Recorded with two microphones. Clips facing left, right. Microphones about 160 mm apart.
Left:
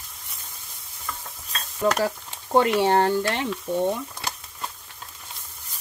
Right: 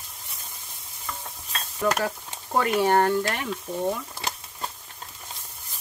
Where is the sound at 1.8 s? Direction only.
30° left (ahead or behind).